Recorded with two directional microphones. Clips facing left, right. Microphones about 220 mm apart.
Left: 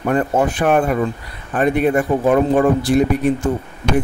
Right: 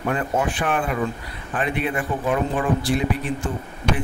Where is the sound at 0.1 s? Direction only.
40° left (ahead or behind).